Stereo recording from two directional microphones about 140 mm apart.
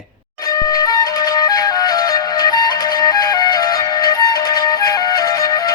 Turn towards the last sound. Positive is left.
turn(degrees=25)  # may be behind; listen again after turning